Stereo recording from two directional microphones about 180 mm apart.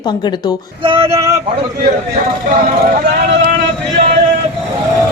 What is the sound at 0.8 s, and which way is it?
Male singing, 30° right (ahead or behind).